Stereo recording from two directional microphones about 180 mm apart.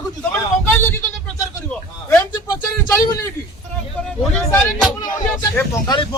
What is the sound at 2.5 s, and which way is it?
Speech, 20° left (ahead or behind).